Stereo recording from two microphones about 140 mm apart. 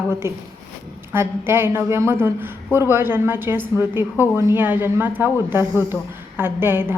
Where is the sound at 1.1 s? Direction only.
15° right (ahead or behind).